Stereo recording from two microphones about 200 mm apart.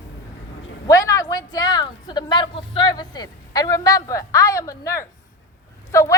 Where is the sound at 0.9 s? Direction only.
15° left (ahead or behind).